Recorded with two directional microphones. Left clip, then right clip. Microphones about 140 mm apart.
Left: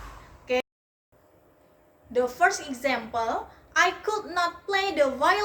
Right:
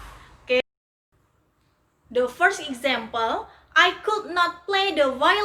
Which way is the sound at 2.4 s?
20° right (ahead or behind).